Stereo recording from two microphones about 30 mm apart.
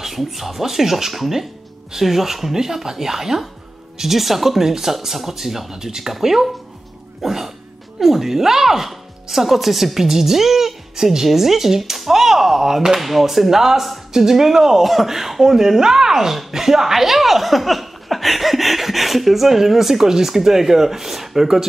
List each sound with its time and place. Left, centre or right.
0.0 s speech: centre
7.2 s a sound: centre
8.0 s speech: centre